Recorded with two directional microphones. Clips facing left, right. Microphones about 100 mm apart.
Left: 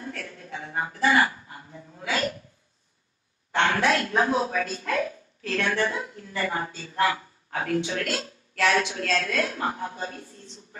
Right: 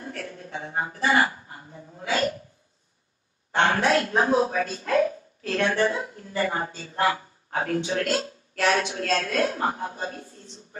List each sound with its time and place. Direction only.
0.0 s a woman's voice: 30° right (ahead or behind)
3.5 s a woman's voice: 30° right (ahead or behind)